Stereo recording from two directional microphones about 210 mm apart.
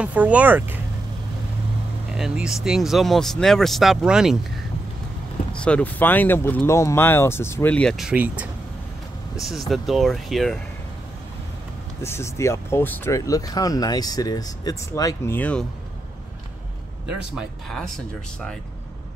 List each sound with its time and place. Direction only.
0.0 s speech: 5° right (ahead or behind)
2.1 s speech: 5° right (ahead or behind)
5.6 s speech: 5° left (ahead or behind)
12.0 s speech: 10° left (ahead or behind)
17.4 s speech: centre (ahead or behind)